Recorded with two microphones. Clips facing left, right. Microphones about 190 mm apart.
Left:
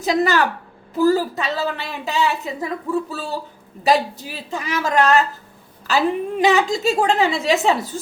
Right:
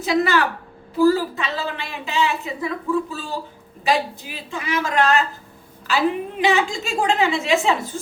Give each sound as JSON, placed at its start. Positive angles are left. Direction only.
{"t": 0.0, "sound": "a woman's voice", "side_deg": 40}